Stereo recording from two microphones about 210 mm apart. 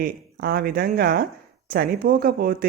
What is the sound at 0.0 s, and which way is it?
Speech, 50° right (ahead or behind).